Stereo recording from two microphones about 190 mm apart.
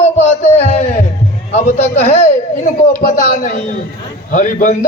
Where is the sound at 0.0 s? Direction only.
35° left (ahead or behind).